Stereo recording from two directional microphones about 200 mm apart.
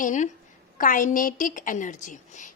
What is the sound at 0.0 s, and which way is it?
A woman's voice, 40° left (ahead or behind).